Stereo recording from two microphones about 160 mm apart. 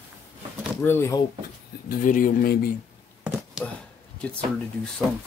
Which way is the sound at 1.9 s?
60° left (ahead or behind).